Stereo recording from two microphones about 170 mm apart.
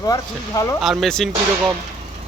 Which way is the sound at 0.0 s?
20° left (ahead or behind).